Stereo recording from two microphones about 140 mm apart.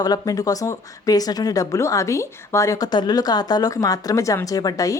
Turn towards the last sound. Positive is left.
turn(degrees=25)  # may be behind; listen again after turning